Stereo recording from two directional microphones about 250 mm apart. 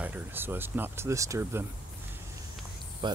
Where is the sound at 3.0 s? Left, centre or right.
Centre.